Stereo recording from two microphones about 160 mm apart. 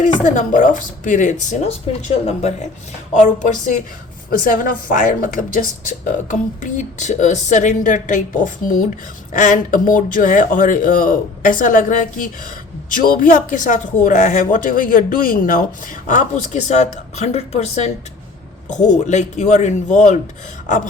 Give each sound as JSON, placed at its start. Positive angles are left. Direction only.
{"t": 0.0, "sound": "a woman's voice", "side_deg": 50}